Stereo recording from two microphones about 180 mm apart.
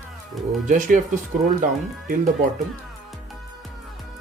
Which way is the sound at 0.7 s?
45° right (ahead or behind).